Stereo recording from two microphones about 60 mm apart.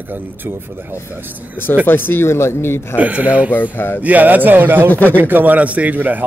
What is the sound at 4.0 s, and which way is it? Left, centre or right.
Speech, right.